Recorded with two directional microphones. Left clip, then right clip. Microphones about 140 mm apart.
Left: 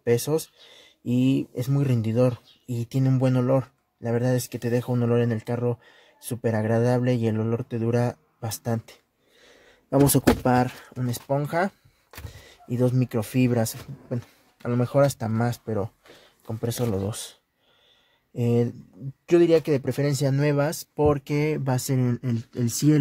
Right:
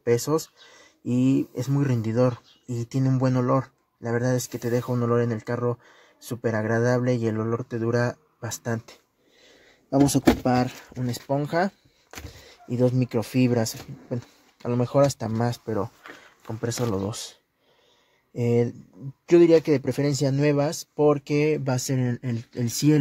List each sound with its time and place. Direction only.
0.0 s speech: 5° left (ahead or behind)
9.8 s speech: 30° left (ahead or behind)
10.4 s speech: 15° left (ahead or behind)
11.0 s speech: 5° right (ahead or behind)